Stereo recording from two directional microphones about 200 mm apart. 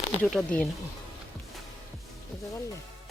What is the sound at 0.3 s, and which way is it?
Speech, 5° left (ahead or behind).